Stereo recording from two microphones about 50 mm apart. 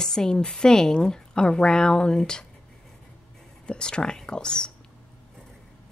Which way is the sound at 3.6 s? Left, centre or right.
Centre.